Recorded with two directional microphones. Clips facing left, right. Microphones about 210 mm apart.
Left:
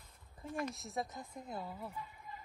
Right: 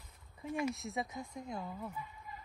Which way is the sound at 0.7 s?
Centre (ahead or behind).